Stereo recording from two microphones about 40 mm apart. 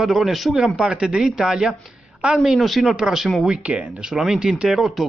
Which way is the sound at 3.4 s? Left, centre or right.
Right.